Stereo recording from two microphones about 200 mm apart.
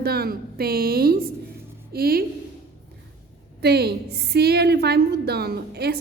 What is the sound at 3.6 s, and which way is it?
A woman's voice, 50° right (ahead or behind).